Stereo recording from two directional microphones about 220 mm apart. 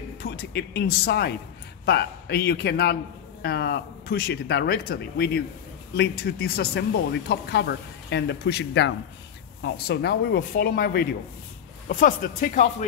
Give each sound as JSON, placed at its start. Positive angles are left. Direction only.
{"t": 0.2, "sound": "speech", "side_deg": 50}